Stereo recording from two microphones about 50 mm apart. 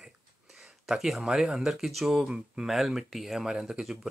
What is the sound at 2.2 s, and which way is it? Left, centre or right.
Speech, right.